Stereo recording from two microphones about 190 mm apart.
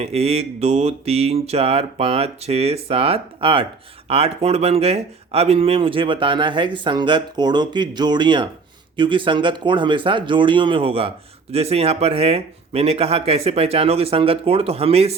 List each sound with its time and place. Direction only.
0.0 s speech: 30° right (ahead or behind)